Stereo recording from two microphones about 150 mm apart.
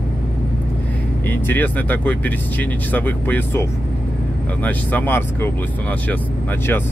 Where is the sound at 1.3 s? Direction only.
10° left (ahead or behind).